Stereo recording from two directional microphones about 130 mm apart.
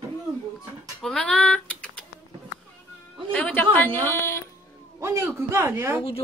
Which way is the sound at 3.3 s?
15° left (ahead or behind).